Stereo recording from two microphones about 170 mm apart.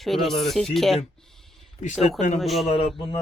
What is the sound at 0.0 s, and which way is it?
Speech, centre (ahead or behind).